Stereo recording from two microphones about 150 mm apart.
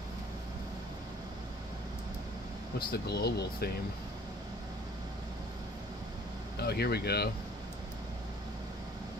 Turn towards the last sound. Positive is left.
turn(degrees=90)